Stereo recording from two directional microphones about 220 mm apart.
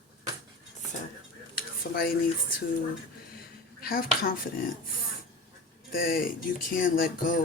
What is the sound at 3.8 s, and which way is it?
Speech, 40° left (ahead or behind).